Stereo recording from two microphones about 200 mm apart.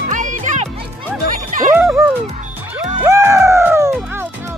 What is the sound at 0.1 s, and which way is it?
Music, 40° right (ahead or behind).